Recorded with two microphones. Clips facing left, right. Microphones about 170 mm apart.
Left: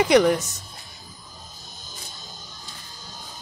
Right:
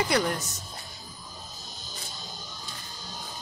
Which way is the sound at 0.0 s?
90° left.